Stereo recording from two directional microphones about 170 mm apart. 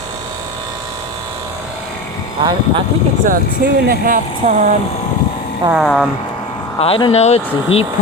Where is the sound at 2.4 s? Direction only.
30° right (ahead or behind).